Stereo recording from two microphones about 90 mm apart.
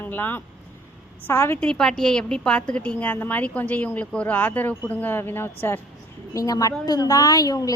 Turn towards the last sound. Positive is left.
turn(degrees=40)  # may be behind; listen again after turning